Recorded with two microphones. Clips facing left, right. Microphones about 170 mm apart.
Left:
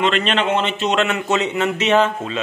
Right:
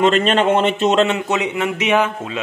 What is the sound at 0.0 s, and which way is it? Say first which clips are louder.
Speech: right 4 dB; 45° right (ahead or behind).